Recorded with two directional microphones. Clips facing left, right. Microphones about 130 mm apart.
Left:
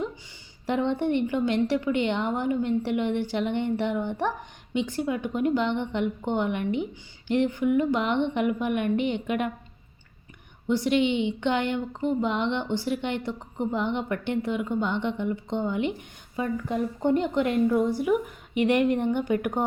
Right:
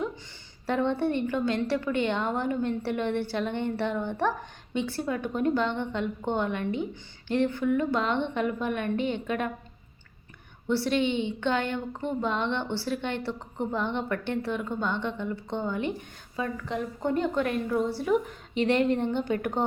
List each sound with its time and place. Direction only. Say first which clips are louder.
0.7 s a woman's voice: left 1 dB; 15° left (ahead or behind)
10.7 s a woman's voice: left 3 dB; 15° left (ahead or behind)